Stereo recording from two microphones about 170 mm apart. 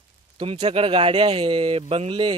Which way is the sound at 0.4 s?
35° right (ahead or behind).